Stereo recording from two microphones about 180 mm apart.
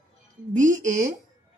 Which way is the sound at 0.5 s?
45° right (ahead or behind).